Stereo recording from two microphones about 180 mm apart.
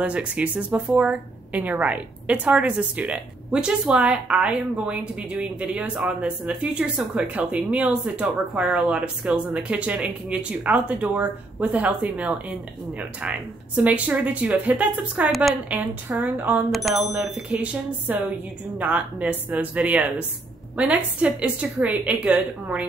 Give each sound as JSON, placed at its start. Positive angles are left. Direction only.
{"t": 0.0, "sound": "speech", "side_deg": -5}